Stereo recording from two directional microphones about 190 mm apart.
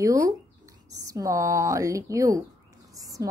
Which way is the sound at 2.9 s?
20° right (ahead or behind).